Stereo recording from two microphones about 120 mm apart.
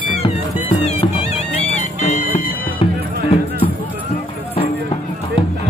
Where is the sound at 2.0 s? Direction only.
75° left (ahead or behind).